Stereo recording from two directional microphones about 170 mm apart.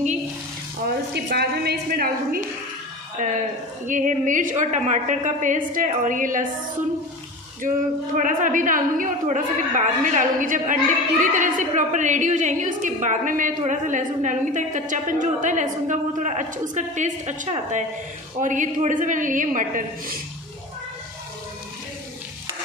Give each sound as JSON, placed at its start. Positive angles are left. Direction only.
{"t": 0.8, "sound": "a woman's voice", "side_deg": -70}
{"t": 3.2, "sound": "a man's voice", "side_deg": -50}
{"t": 8.2, "sound": "a man's voice", "side_deg": -50}